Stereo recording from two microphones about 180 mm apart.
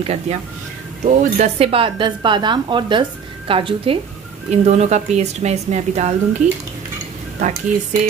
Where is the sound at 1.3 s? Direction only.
35° right (ahead or behind).